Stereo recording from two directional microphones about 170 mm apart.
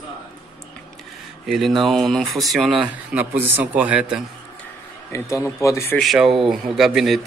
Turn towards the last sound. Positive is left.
turn(degrees=0)  # may be behind; listen again after turning